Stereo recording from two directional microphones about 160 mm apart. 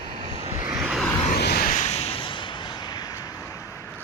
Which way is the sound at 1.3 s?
80° left.